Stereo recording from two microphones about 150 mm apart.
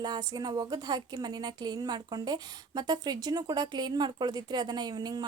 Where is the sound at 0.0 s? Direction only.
25° right (ahead or behind).